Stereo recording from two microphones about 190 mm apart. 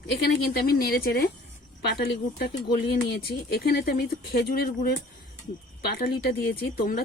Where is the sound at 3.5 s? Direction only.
55° left (ahead or behind).